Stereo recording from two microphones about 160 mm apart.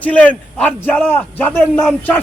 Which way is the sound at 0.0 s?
10° left (ahead or behind).